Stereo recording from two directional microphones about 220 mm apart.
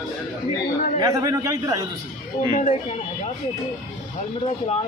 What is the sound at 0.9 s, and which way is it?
Speech, 15° right (ahead or behind).